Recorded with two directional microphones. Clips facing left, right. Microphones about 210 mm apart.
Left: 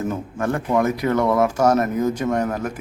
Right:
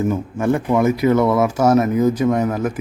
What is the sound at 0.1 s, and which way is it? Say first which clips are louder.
Speech: right 5 dB; 15° right (ahead or behind).